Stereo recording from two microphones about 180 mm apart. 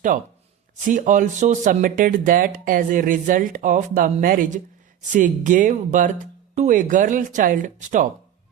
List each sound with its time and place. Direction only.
0.8 s speech: 45° right (ahead or behind)